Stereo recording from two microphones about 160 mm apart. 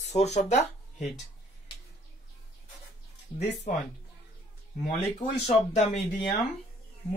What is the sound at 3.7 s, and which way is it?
Speech, 55° left (ahead or behind).